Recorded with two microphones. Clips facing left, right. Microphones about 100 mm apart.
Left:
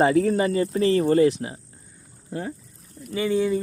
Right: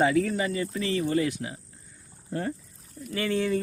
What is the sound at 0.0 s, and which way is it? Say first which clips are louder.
Speech: left 5 dB; 35° left (ahead or behind).